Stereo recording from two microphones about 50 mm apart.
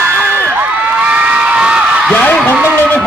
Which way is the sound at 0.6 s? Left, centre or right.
Right.